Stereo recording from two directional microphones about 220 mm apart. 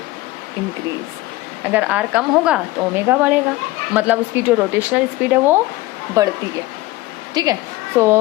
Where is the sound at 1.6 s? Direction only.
5° right (ahead or behind).